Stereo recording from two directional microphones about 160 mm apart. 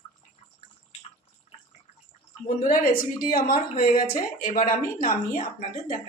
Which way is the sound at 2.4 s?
55° left (ahead or behind).